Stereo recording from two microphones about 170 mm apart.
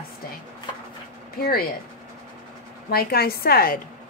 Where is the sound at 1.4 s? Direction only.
60° left (ahead or behind).